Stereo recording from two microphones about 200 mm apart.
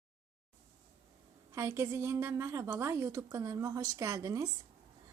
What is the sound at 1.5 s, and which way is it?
A woman's voice, 15° right (ahead or behind).